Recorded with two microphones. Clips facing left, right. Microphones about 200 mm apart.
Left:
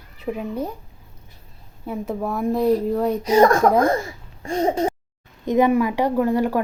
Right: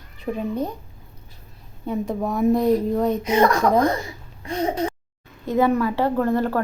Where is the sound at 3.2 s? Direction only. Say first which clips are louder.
Left 7 dB; 35° left (ahead or behind).